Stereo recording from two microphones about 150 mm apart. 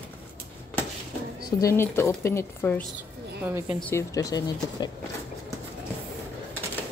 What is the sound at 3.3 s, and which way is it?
Speech, 10° right (ahead or behind).